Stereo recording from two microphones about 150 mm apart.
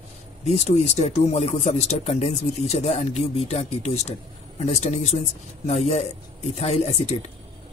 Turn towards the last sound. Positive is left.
turn(degrees=45)  # may be behind; listen again after turning